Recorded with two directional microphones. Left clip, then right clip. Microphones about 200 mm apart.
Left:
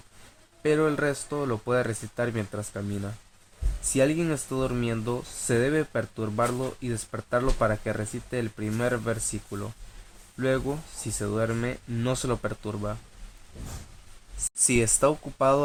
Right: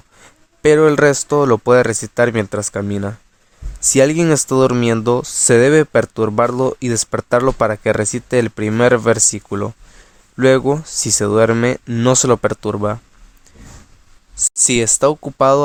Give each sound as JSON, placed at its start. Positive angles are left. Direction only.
{"t": 0.6, "sound": "speech", "side_deg": -50}
{"t": 14.3, "sound": "speech", "side_deg": -45}